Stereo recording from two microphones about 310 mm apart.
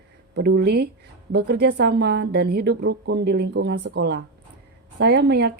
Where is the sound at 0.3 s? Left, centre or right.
Right.